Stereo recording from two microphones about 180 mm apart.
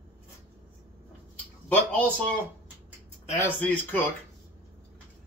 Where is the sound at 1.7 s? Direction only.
5° left (ahead or behind).